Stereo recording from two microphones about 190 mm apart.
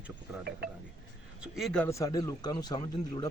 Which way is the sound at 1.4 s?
Centre (ahead or behind).